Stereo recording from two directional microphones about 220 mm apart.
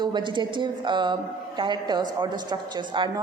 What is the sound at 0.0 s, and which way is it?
A woman's voice, 20° right (ahead or behind).